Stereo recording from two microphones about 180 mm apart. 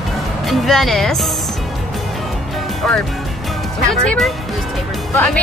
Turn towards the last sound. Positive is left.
turn(degrees=5)  # may be behind; listen again after turning